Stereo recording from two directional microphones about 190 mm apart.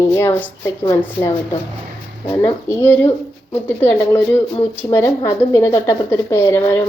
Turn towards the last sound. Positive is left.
turn(degrees=10)  # may be behind; listen again after turning